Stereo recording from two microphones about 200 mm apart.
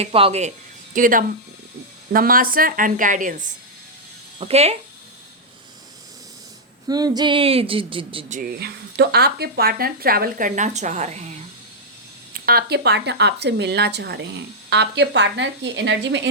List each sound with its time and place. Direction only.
0.0 s speech: 30° right (ahead or behind)
0.9 s speech: 45° right (ahead or behind)
6.8 s speech: 20° right (ahead or behind)
8.3 s speech: 45° right (ahead or behind)
12.3 s speech: 50° right (ahead or behind); by 16.2 s 65° right (ahead or behind)